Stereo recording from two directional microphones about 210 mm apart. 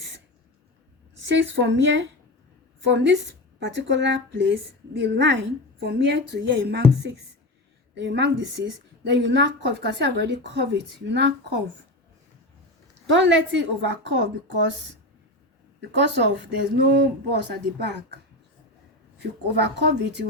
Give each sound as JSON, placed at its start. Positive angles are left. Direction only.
{"t": 1.5, "sound": "a woman's voice", "side_deg": -60}
{"t": 13.1, "sound": "a woman's voice", "side_deg": -60}
{"t": 16.0, "sound": "speech", "side_deg": -55}
{"t": 19.2, "sound": "a woman's voice", "side_deg": -55}